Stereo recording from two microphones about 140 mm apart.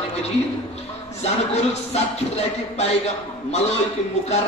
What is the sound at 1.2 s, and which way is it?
Speech, 50° left (ahead or behind).